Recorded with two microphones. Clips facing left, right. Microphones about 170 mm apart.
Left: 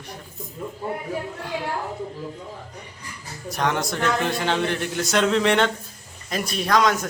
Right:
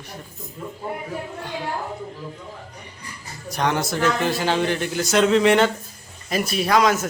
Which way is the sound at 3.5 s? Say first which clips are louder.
Right 1 dB; centre (ahead or behind).